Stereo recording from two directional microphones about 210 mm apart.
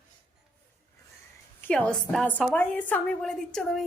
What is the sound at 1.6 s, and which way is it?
A woman's voice, 5° left (ahead or behind).